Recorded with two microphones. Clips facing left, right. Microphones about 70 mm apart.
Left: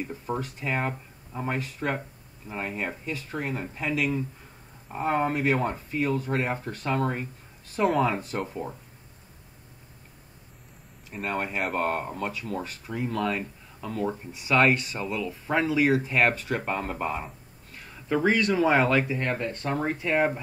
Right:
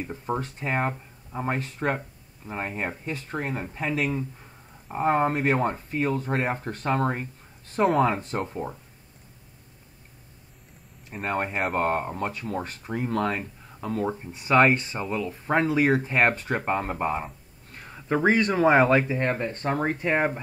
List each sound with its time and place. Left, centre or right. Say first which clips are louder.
0.0 s speech: right 2 dB; right
0.4 s speech: right 1 dB; right
11.1 s speech: right 2 dB; right
14.6 s speech: right 2 dB; right